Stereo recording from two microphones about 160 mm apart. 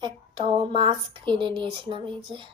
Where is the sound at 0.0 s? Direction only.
30° right (ahead or behind).